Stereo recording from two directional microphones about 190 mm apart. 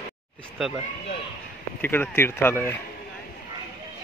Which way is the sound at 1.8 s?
10° left (ahead or behind).